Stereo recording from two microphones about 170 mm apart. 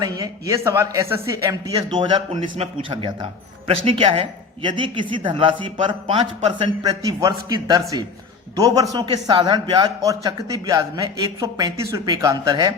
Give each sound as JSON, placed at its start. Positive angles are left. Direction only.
{"t": 0.0, "sound": "a man's voice", "side_deg": -20}